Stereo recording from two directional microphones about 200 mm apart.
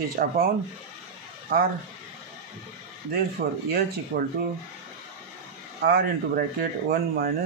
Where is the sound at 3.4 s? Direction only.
40° right (ahead or behind).